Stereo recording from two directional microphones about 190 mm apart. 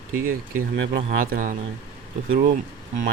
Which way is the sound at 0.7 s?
65° right (ahead or behind).